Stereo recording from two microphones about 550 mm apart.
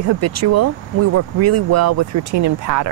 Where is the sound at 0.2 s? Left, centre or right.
Right.